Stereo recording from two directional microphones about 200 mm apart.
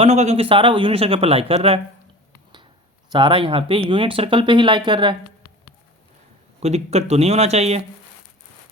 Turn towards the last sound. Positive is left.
turn(degrees=-30)  # may be behind; listen again after turning